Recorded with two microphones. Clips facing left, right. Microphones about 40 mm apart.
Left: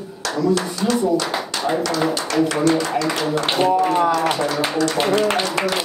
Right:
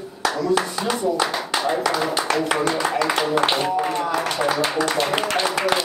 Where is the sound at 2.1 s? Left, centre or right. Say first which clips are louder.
Left 1 dB; centre.